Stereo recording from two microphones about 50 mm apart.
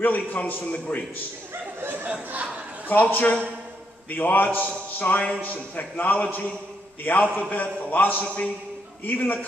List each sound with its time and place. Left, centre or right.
0.0 s a man's voice: left
0.7 s a man's voice: left
2.0 s a sound: right
2.9 s a man's voice: left